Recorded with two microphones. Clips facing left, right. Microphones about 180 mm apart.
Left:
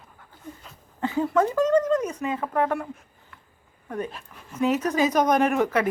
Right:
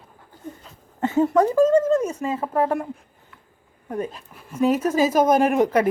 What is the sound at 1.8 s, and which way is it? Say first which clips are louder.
Speech: right 3 dB; 25° right (ahead or behind).